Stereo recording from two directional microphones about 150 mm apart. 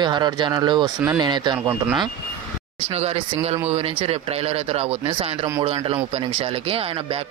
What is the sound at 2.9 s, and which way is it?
Speech, 45° right (ahead or behind).